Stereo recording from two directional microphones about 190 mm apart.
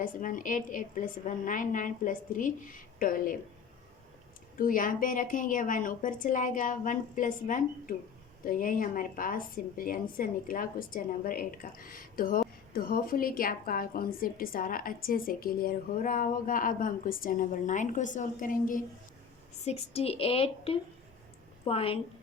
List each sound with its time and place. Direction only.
0.0 s a woman's voice: 45° left (ahead or behind)
4.5 s a woman's voice: 45° left (ahead or behind)
19.6 s a woman's voice: 30° left (ahead or behind)